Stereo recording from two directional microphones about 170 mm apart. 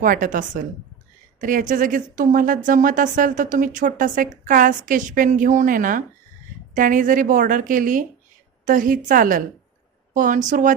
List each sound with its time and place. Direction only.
0.0 s a woman's voice: 50° right (ahead or behind)